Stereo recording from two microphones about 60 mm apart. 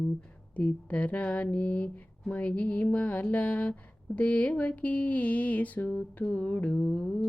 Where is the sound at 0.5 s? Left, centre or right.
Left.